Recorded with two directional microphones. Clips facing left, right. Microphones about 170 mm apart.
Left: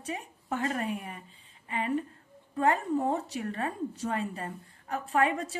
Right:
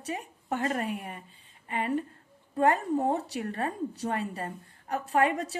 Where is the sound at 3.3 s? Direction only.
35° right (ahead or behind).